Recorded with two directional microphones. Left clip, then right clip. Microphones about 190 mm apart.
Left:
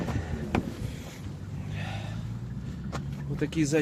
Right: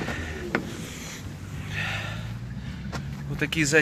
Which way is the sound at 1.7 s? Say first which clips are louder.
Right 10 dB; centre (ahead or behind).